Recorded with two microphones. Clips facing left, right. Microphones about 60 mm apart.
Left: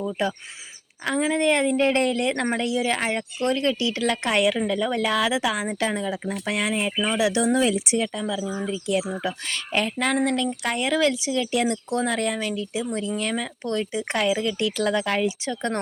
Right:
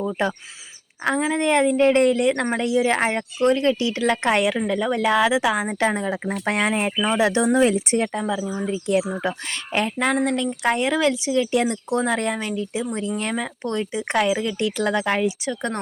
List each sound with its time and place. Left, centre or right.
0.0 s speech: right
1.0 s speech: centre
7.7 s speech: right
9.2 s speech: right